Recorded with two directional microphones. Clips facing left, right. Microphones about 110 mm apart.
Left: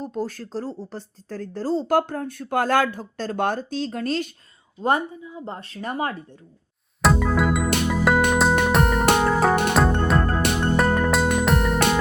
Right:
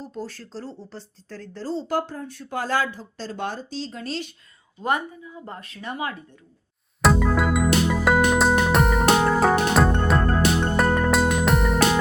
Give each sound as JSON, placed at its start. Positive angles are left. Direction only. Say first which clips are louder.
{"t": 0.0, "sound": "speech", "louder": "left 6 dB", "side_deg": 50}
{"t": 4.8, "sound": "a woman's voice", "louder": "left 3 dB", "side_deg": 30}
{"t": 7.0, "sound": "music", "louder": "even", "side_deg": 0}